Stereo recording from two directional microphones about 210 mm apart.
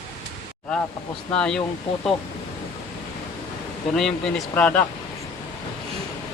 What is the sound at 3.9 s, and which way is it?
Speech, centre (ahead or behind).